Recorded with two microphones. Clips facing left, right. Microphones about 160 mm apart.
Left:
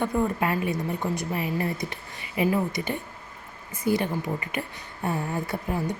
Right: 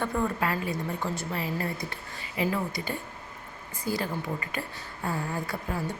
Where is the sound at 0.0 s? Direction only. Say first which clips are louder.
Left 3 dB; 20° left (ahead or behind).